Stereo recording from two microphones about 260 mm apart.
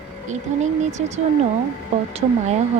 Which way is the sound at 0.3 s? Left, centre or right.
Right.